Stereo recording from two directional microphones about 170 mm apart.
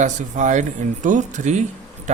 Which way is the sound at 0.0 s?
45° right (ahead or behind).